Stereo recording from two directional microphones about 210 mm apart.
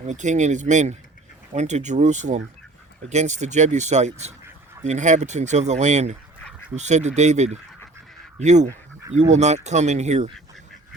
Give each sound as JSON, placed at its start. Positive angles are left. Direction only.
{"t": 0.1, "sound": "speech", "side_deg": -35}